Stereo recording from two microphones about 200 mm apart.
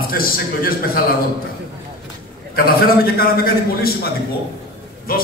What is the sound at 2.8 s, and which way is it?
A man's voice, 50° left (ahead or behind).